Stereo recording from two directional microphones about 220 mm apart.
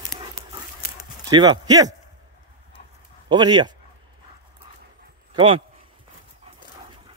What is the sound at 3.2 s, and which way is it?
Speech, 20° right (ahead or behind).